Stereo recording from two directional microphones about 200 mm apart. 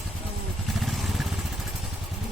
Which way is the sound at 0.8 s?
Centre (ahead or behind).